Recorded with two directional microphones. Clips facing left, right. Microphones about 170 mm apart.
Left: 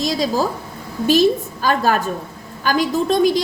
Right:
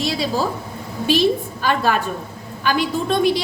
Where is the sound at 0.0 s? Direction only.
40° left (ahead or behind).